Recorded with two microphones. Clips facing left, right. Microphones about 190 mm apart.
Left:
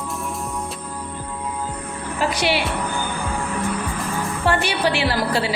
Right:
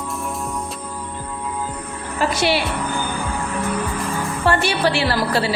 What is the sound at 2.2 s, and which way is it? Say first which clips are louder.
Speech: right 2 dB; 15° left (ahead or behind).